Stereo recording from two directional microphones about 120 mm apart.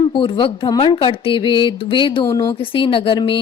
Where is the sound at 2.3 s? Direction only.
25° left (ahead or behind).